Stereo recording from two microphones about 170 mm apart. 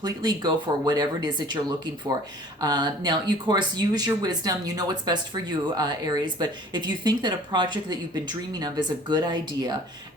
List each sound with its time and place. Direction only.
0.0 s speech: 25° right (ahead or behind)